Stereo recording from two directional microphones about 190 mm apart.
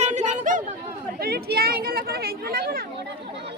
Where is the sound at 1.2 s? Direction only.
55° right (ahead or behind).